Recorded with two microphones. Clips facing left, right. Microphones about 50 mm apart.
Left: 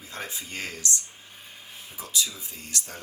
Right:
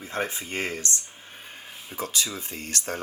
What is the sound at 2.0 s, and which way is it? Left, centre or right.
Speech, right.